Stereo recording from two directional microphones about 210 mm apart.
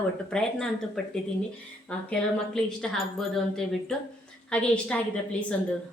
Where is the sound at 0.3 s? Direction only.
5° left (ahead or behind).